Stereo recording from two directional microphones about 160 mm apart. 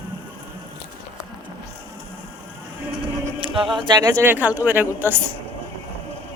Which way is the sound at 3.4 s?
35° right (ahead or behind).